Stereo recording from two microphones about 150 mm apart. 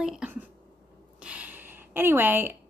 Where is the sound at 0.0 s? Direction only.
5° right (ahead or behind).